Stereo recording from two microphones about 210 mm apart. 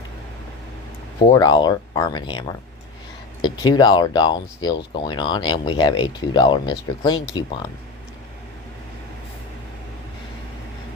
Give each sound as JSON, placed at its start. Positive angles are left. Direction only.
{"t": 1.3, "sound": "speech", "side_deg": 20}